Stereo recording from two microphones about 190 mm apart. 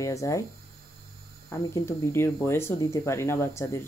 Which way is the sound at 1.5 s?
15° left (ahead or behind).